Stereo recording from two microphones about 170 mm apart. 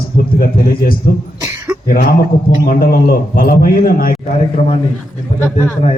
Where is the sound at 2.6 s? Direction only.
60° left (ahead or behind).